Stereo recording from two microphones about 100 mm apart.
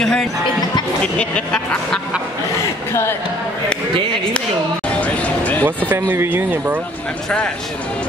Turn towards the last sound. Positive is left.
turn(degrees=-20)  # may be behind; listen again after turning